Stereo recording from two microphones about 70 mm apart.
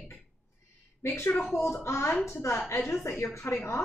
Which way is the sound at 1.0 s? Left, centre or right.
Left.